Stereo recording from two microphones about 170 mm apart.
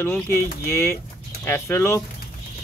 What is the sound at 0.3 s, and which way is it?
Speech, 15° left (ahead or behind).